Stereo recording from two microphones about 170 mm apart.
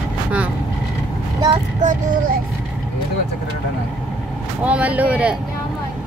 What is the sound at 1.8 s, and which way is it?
Speech, 50° right (ahead or behind).